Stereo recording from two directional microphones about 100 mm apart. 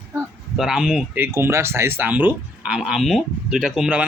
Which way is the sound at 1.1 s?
20° right (ahead or behind).